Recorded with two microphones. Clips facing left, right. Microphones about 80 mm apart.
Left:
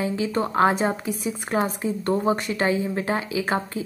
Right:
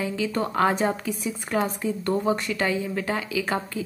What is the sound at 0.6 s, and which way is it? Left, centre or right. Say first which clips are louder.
A woman's voice: left 2 dB; centre.